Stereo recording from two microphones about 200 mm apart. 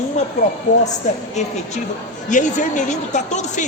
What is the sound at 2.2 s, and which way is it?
Speech, 40° left (ahead or behind).